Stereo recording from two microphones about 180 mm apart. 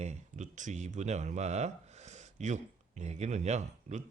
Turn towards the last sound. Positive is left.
turn(degrees=-40)  # may be behind; listen again after turning